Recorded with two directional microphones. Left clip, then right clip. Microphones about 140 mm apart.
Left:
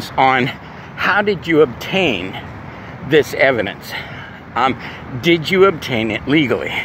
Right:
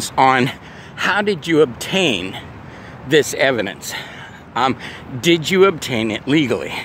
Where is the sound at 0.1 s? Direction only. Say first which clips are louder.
Even; 60° right (ahead or behind).